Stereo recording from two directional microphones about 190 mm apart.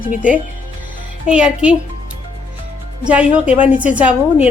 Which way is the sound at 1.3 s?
5° right (ahead or behind).